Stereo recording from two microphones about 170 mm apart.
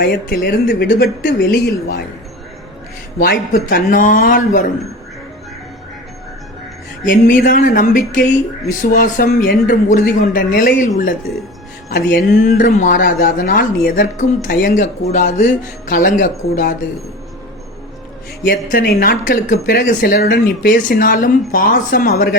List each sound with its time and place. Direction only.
0.0 s speech: 70° left (ahead or behind)
0.7 s speech: 55° left (ahead or behind)
3.2 s speech: 60° left (ahead or behind)
7.0 s speech: 50° left (ahead or behind)
18.4 s speech: 65° left (ahead or behind)